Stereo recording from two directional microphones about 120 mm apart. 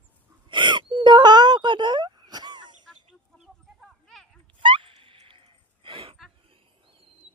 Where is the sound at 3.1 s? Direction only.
5° right (ahead or behind).